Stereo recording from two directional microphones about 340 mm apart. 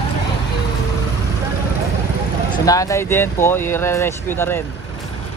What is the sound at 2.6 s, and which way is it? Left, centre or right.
Speech, centre.